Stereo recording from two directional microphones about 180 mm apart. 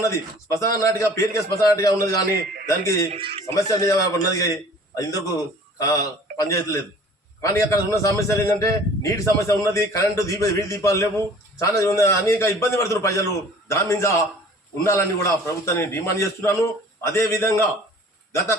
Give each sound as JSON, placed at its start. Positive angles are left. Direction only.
{"t": 0.0, "sound": "a man's voice", "side_deg": 15}
{"t": 3.1, "sound": "speech", "side_deg": -30}
{"t": 3.4, "sound": "a man's voice", "side_deg": 20}